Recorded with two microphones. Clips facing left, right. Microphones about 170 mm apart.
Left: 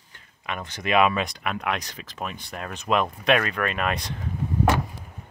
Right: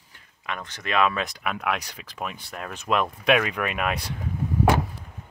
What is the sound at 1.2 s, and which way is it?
Speech, 5° right (ahead or behind).